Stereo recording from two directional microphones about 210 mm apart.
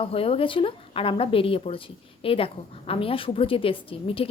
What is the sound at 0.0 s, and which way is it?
Speech, 25° left (ahead or behind).